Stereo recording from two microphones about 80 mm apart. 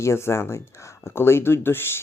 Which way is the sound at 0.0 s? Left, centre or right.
Left.